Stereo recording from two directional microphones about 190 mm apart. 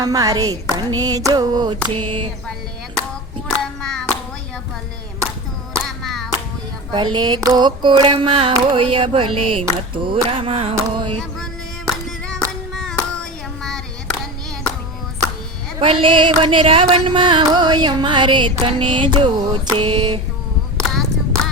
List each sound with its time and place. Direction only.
0.0 s carnatic music: 20° right (ahead or behind)
3.8 s hands: 5° left (ahead or behind)
6.0 s clapping: centre (ahead or behind)
6.9 s carnatic music: 25° right (ahead or behind)
12.7 s hands: 5° left (ahead or behind)
13.6 s a sound: centre (ahead or behind)
15.8 s carnatic music: 25° right (ahead or behind)
20.7 s a sound: centre (ahead or behind)